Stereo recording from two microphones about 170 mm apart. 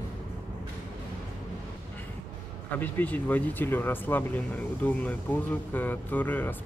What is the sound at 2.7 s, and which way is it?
Speech, 10° left (ahead or behind).